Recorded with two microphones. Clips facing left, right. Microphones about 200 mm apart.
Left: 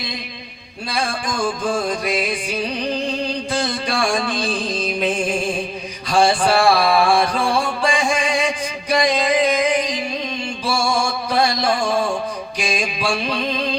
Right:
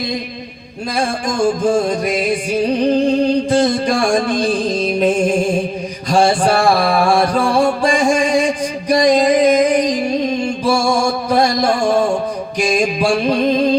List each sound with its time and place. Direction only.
0.9 s music: 45° right (ahead or behind)